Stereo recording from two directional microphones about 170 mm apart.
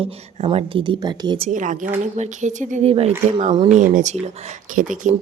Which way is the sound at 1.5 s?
50° right (ahead or behind).